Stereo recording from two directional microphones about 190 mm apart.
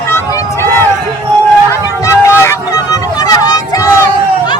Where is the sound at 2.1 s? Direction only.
15° left (ahead or behind).